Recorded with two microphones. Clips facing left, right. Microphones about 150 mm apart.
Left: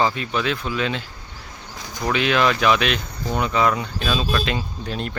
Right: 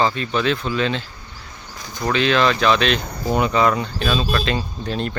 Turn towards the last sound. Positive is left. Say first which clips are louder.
# right 3 dB
turn(degrees=5)  # may be behind; listen again after turning